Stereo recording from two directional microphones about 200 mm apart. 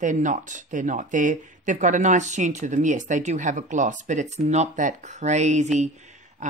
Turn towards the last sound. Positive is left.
turn(degrees=-40)  # may be behind; listen again after turning